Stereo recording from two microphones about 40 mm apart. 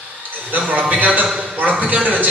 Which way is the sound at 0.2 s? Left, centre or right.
Right.